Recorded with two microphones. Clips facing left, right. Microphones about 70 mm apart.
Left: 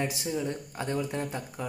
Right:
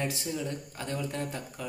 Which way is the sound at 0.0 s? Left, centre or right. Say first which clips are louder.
Left 2 dB; centre.